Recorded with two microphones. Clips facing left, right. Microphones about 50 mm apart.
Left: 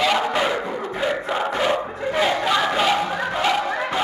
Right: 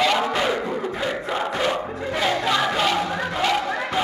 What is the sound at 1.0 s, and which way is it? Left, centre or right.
Crowd, centre.